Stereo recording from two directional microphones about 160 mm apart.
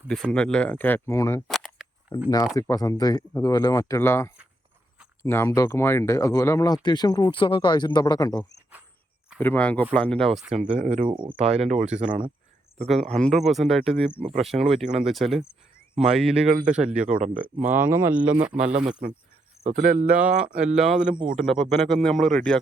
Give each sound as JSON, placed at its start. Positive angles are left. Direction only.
{"t": 0.1, "sound": "speech", "side_deg": 5}
{"t": 1.5, "sound": "a sound", "side_deg": 0}
{"t": 2.6, "sound": "speech", "side_deg": 20}
{"t": 9.4, "sound": "speech", "side_deg": 10}
{"t": 10.5, "sound": "speech", "side_deg": -45}
{"t": 12.8, "sound": "speech", "side_deg": 0}
{"t": 13.9, "sound": "speech", "side_deg": 10}
{"t": 14.3, "sound": "speech", "side_deg": 0}
{"t": 17.2, "sound": "speech", "side_deg": -55}
{"t": 17.7, "sound": "speech", "side_deg": -15}
{"t": 18.5, "sound": "speech", "side_deg": -55}
{"t": 18.8, "sound": "speech", "side_deg": -5}
{"t": 19.6, "sound": "speech", "side_deg": -55}
{"t": 21.3, "sound": "speech", "side_deg": 5}